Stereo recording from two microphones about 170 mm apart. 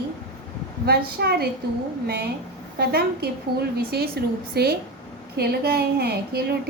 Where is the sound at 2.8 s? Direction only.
70° right (ahead or behind).